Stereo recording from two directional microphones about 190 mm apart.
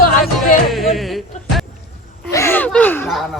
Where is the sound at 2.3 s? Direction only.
10° left (ahead or behind).